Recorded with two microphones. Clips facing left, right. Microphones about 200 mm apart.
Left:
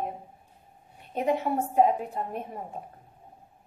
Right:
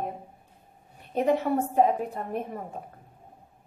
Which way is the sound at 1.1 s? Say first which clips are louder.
Right 3 dB; 40° right (ahead or behind).